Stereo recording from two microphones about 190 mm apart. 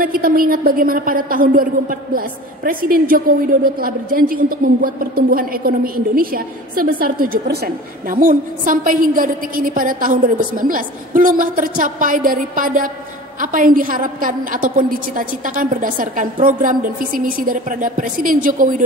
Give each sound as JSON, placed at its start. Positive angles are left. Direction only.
{"t": 0.0, "sound": "a woman's voice", "side_deg": -50}